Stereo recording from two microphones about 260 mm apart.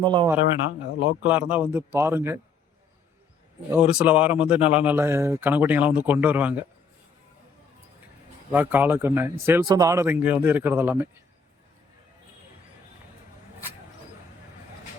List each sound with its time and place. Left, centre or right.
0.0 s speech: centre
1.2 s speech: centre
3.7 s speech: centre
8.5 s speech: centre